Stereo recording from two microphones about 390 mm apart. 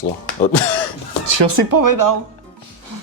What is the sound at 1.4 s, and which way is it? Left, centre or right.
Speech, right.